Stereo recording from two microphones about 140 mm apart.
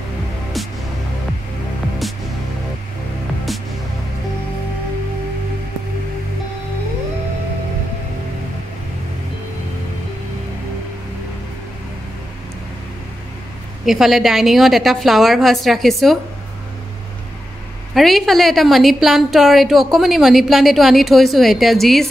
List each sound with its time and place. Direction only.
13.8 s a woman's voice: centre (ahead or behind)
17.9 s a woman's voice: centre (ahead or behind)